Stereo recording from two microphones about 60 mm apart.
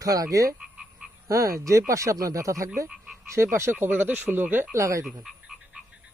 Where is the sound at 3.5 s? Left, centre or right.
Right.